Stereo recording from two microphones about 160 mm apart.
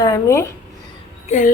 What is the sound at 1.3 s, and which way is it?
Speech, 50° left (ahead or behind).